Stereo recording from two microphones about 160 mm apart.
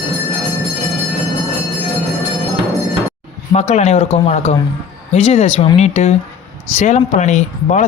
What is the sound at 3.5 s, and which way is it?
Speech, 45° left (ahead or behind).